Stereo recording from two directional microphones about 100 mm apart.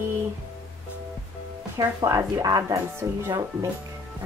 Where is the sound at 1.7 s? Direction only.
35° right (ahead or behind).